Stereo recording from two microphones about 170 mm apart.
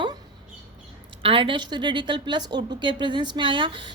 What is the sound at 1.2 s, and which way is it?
A woman's voice, 30° right (ahead or behind).